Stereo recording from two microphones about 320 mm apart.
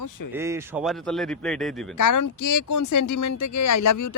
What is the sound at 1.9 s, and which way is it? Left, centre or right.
Speech, left.